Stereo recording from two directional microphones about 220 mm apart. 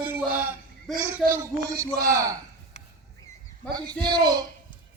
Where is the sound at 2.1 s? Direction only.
15° right (ahead or behind).